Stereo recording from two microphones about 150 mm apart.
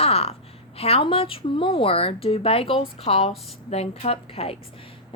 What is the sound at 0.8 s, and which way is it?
A woman's voice, 40° left (ahead or behind).